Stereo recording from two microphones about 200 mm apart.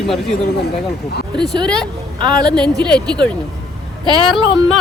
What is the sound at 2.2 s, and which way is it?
Speech, 20° right (ahead or behind).